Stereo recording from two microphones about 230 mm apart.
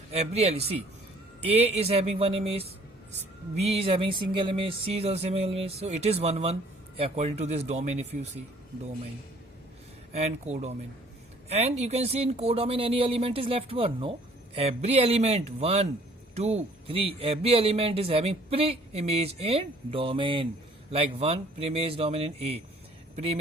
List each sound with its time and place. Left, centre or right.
0.1 s speech: right
10.1 s speech: right